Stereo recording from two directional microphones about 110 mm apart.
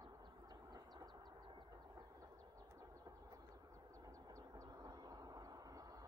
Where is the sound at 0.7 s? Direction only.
40° right (ahead or behind).